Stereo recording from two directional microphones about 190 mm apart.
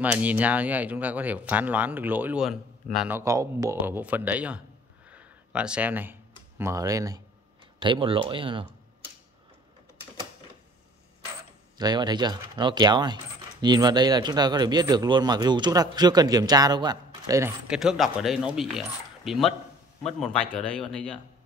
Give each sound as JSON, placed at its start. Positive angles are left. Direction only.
{"t": 0.0, "sound": "speech", "side_deg": -10}
{"t": 5.1, "sound": "a sound", "side_deg": -5}
{"t": 6.6, "sound": "speech", "side_deg": -15}
{"t": 11.8, "sound": "speech", "side_deg": -20}
{"t": 17.6, "sound": "speech", "side_deg": -5}